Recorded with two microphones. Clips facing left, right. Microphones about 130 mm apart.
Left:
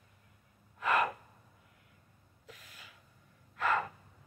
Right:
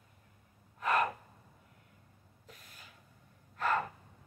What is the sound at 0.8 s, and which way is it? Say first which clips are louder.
Gasp: even; 40° right (ahead or behind).